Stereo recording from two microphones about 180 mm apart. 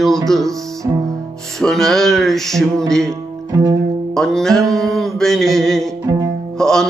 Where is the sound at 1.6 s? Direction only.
Centre (ahead or behind).